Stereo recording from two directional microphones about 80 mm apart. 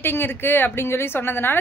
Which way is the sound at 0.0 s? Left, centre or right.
Left.